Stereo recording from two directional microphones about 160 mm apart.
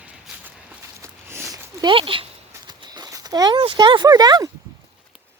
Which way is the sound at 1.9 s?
35° right (ahead or behind).